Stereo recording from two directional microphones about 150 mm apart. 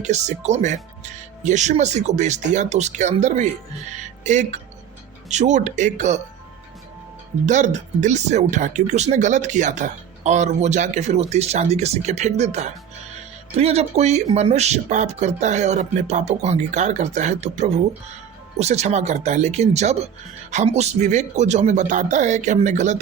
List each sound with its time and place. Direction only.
0.0 s speech: 50° right (ahead or behind)
3.9 s music: 50° right (ahead or behind)
5.3 s speech: 50° right (ahead or behind)
7.4 s speech: 55° right (ahead or behind)